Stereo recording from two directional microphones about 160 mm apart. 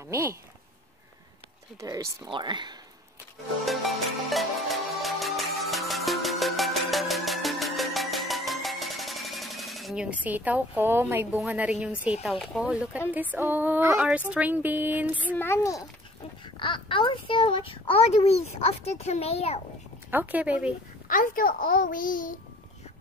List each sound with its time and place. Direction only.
0.1 s speech: 15° right (ahead or behind)
1.8 s speech: 20° right (ahead or behind)
3.6 s music: centre (ahead or behind)
12.0 s speech: 5° right (ahead or behind)
15.3 s a child's voice: 15° left (ahead or behind)
16.5 s a child's voice: 30° left (ahead or behind)
20.1 s speech: 10° right (ahead or behind)
21.1 s a child's voice: 60° left (ahead or behind)